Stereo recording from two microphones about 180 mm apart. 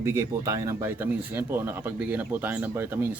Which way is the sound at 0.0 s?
15° right (ahead or behind).